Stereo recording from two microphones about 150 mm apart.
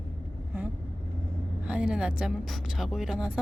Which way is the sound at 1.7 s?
5° right (ahead or behind).